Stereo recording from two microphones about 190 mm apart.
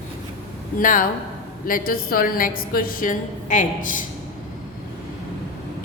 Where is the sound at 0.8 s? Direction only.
45° left (ahead or behind).